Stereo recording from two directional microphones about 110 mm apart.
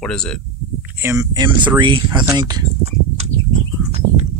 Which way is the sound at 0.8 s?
20° right (ahead or behind).